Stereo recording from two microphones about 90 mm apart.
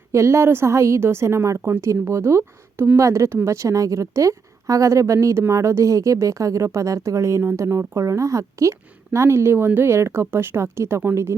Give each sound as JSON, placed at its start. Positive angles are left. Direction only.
{"t": 0.1, "sound": "speech", "side_deg": -30}